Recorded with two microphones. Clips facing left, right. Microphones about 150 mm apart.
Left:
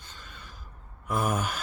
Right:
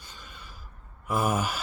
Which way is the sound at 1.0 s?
5° right (ahead or behind).